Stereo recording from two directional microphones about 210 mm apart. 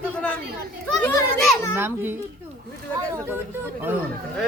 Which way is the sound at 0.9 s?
Centre (ahead or behind).